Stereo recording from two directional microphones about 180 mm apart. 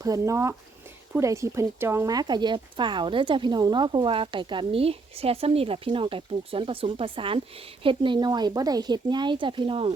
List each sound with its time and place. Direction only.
0.0 s speech: 20° right (ahead or behind)